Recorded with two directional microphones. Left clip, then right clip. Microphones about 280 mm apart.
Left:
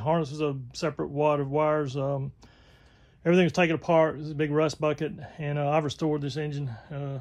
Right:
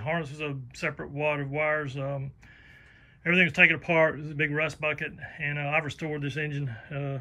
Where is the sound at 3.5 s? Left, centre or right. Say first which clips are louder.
Right 1 dB; left.